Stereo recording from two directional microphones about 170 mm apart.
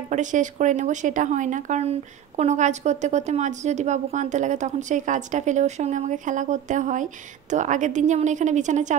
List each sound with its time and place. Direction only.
0.1 s speech: 45° right (ahead or behind)